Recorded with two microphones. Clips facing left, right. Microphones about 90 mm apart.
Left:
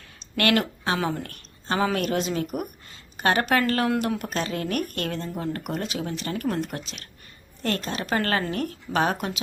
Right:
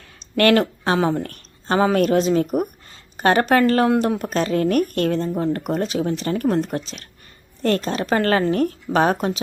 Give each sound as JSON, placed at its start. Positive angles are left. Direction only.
{"t": 0.3, "sound": "speech", "side_deg": -35}